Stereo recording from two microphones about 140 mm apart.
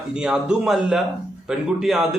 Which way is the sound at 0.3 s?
5° right (ahead or behind).